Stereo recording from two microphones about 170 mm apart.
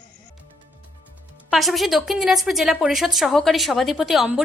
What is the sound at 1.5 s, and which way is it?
A woman's voice, centre (ahead or behind).